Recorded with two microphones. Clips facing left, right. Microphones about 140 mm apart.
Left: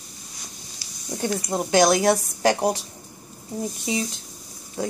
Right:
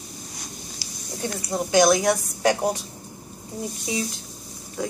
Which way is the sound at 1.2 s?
30° left (ahead or behind).